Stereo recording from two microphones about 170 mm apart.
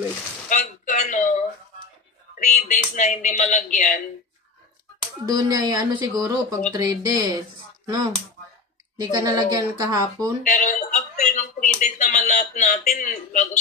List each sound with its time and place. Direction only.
0.5 s a sound: 50° left (ahead or behind)
2.3 s speech: 50° left (ahead or behind)
5.3 s speech: 20° right (ahead or behind)
10.4 s speech: 45° left (ahead or behind)